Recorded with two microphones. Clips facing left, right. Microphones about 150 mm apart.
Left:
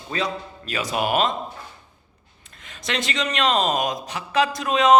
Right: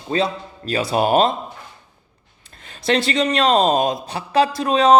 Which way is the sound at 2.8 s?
35° right (ahead or behind).